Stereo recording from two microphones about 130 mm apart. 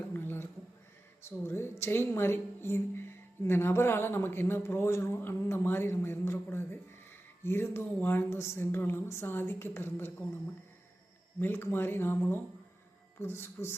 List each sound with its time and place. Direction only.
0.1 s a sound: 15° left (ahead or behind)
1.2 s a woman's voice: 20° left (ahead or behind)
11.3 s a woman's voice: 15° left (ahead or behind)